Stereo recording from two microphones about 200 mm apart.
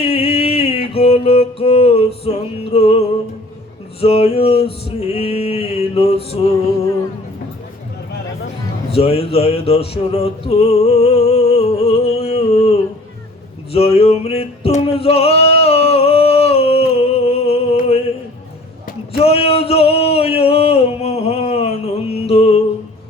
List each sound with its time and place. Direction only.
0.0 s music: 30° left (ahead or behind)
4.0 s a sound: 30° left (ahead or behind)
4.9 s male singing: 30° left (ahead or behind)
8.9 s music: 30° left (ahead or behind)
13.7 s male singing: 30° left (ahead or behind)
19.2 s a sound: 30° left (ahead or behind)